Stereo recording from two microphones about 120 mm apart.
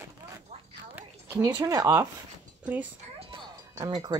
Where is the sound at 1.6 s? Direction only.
30° right (ahead or behind).